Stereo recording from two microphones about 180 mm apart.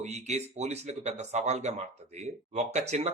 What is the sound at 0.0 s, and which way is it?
Speech, 40° right (ahead or behind).